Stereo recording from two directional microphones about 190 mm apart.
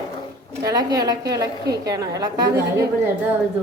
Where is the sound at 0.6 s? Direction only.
20° right (ahead or behind).